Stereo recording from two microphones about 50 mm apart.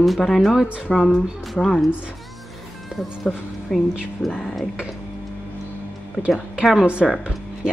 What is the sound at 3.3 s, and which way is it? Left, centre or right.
A woman's voice, centre.